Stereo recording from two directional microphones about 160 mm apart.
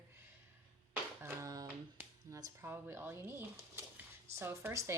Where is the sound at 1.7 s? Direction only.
10° right (ahead or behind).